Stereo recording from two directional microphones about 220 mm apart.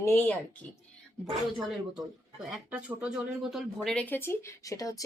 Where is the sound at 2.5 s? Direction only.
5° right (ahead or behind).